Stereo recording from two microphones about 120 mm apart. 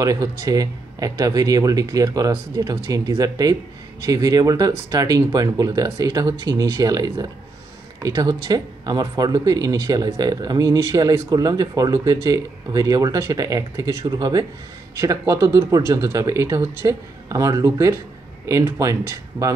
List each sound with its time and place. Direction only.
0.0 s speech: 30° right (ahead or behind)